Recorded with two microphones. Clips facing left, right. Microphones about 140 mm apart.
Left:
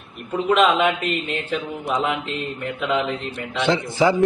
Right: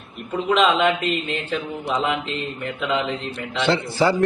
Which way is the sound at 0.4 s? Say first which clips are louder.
Left 1 dB; 5° left (ahead or behind).